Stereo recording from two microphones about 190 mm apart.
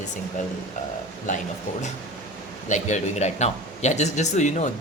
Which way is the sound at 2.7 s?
40° left (ahead or behind).